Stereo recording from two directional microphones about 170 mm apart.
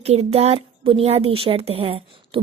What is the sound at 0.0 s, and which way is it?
A woman's voice, 40° right (ahead or behind).